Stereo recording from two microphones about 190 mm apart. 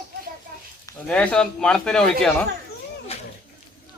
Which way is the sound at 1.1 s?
5° left (ahead or behind).